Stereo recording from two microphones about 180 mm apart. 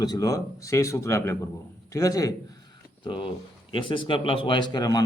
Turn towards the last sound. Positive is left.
turn(degrees=20)  # may be behind; listen again after turning